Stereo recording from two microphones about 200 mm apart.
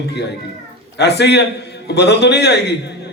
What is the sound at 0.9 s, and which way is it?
A man's voice, 55° left (ahead or behind).